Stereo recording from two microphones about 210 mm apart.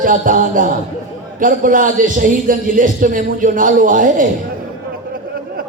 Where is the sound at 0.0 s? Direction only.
40° right (ahead or behind).